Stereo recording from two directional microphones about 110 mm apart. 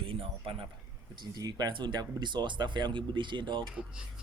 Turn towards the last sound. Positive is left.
turn(degrees=-45)  # may be behind; listen again after turning